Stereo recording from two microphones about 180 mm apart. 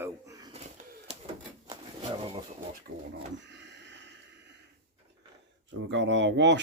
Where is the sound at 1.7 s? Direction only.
30° right (ahead or behind).